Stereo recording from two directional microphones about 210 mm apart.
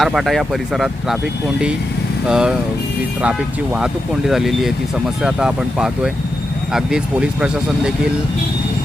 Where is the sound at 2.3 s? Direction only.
5° right (ahead or behind).